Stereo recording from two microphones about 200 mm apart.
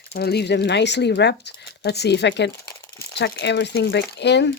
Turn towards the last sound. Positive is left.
turn(degrees=60)  # may be behind; listen again after turning